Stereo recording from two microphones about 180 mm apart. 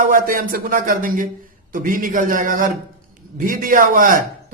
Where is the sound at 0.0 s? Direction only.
50° right (ahead or behind).